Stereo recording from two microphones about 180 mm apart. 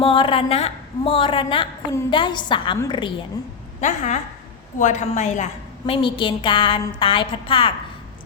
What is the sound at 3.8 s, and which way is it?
A woman's voice, 40° left (ahead or behind).